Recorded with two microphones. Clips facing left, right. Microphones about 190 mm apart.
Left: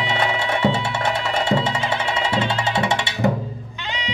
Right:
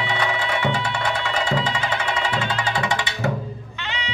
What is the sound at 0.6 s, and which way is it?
Music, 25° left (ahead or behind).